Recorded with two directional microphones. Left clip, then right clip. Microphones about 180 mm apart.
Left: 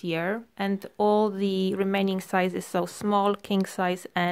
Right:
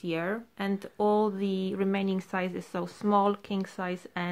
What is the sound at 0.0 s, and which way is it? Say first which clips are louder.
Speech: left 3 dB; 40° left (ahead or behind).